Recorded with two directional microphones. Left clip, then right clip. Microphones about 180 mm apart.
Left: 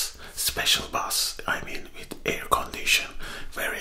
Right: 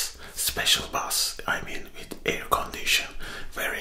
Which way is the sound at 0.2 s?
25° left (ahead or behind).